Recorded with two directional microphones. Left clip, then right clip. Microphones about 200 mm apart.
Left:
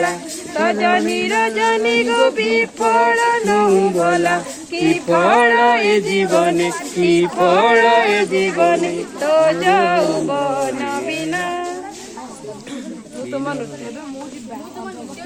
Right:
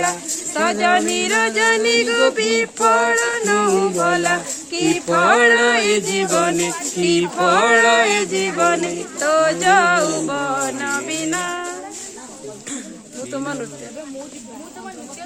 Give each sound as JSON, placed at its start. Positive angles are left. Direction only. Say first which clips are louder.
{"t": 0.0, "sound": "speech", "louder": "left 1 dB", "side_deg": -65}
{"t": 13.3, "sound": "speech", "louder": "left 3 dB", "side_deg": -50}